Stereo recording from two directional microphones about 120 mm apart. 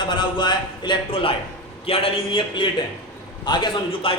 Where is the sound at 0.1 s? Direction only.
40° left (ahead or behind).